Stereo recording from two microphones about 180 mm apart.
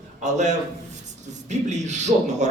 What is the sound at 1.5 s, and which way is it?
Speech, 40° right (ahead or behind).